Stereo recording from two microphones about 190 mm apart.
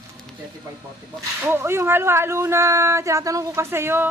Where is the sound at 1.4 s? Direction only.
10° right (ahead or behind).